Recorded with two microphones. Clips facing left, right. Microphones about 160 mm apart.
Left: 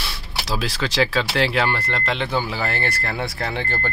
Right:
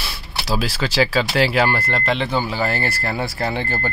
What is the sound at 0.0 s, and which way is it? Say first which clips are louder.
Speech: right 1 dB; 5° right (ahead or behind).